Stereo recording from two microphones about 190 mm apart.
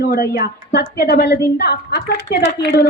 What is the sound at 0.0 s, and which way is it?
A woman's voice, 55° left (ahead or behind).